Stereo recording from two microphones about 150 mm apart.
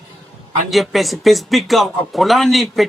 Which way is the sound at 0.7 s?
Centre (ahead or behind).